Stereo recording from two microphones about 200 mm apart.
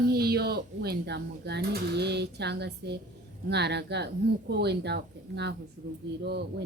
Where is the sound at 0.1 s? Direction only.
50° right (ahead or behind).